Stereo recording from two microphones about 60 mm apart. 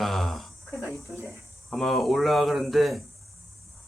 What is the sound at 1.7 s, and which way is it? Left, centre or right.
Speech, centre.